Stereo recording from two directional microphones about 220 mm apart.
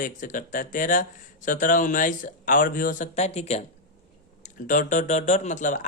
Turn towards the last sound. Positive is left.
turn(degrees=35)  # may be behind; listen again after turning